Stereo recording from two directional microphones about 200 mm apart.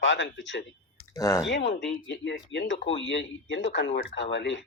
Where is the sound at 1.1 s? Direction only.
15° left (ahead or behind).